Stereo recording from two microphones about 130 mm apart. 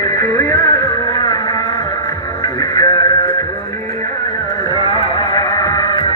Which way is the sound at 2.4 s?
30° left (ahead or behind).